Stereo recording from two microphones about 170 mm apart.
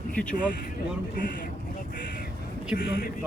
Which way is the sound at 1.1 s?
55° left (ahead or behind).